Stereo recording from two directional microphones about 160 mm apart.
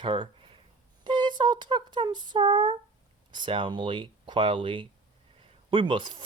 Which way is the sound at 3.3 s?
30° right (ahead or behind).